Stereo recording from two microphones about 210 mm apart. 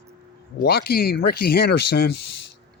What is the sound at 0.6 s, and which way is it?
Speech, 50° left (ahead or behind).